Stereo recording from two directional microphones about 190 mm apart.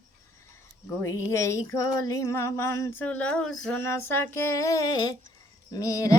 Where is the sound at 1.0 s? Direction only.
15° left (ahead or behind).